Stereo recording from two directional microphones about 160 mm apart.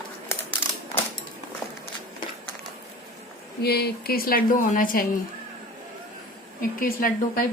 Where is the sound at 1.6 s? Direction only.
Centre (ahead or behind).